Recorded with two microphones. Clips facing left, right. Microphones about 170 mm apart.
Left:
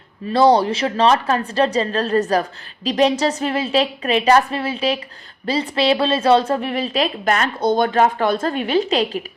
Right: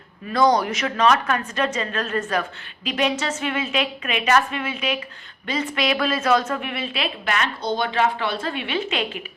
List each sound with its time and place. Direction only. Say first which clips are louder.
0.3 s a woman's voice: left 5 dB; 30° left (ahead or behind)